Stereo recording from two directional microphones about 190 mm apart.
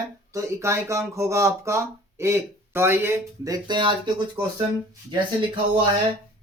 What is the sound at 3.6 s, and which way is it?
Speech, 25° right (ahead or behind).